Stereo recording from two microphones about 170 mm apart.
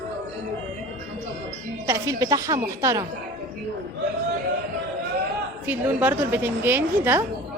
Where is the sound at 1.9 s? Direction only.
20° right (ahead or behind).